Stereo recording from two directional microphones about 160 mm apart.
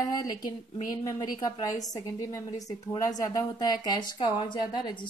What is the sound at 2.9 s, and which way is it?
Speech, 25° left (ahead or behind).